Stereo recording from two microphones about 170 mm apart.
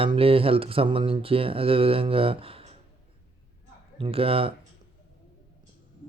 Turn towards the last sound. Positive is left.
turn(degrees=-35)  # may be behind; listen again after turning